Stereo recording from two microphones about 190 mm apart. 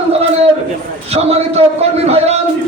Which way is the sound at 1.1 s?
35° right (ahead or behind).